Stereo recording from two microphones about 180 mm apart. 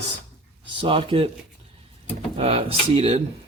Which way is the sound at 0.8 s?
30° right (ahead or behind).